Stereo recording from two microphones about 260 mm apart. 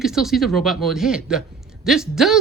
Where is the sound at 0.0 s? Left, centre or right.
Centre.